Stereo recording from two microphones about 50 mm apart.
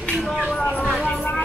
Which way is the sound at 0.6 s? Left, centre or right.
Left.